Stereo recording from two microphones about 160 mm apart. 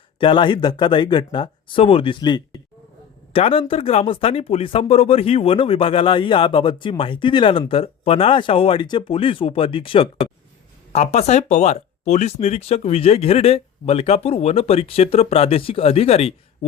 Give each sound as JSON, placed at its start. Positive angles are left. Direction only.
{"t": 0.2, "sound": "speech", "side_deg": 30}